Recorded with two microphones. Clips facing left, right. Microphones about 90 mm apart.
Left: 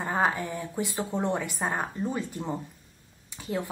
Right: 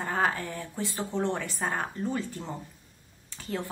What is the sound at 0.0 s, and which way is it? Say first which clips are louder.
Speech: left 2 dB; 15° left (ahead or behind).